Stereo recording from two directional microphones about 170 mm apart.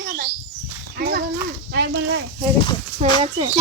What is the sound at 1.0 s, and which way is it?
Livestock, 65° right (ahead or behind).